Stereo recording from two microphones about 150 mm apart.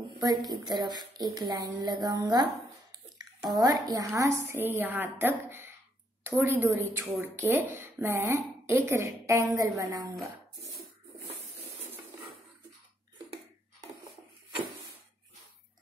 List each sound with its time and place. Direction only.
0.2 s a woman's voice: 25° right (ahead or behind)
2.9 s a sound: 25° right (ahead or behind)
3.8 s a woman's voice: 25° right (ahead or behind)